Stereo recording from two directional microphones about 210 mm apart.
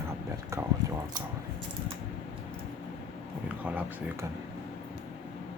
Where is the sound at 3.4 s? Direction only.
10° right (ahead or behind).